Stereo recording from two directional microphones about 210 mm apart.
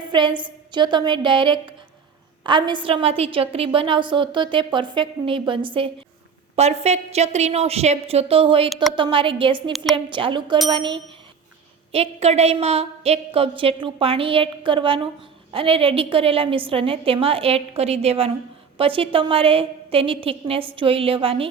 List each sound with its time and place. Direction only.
0.0 s a woman's voice: 20° right (ahead or behind)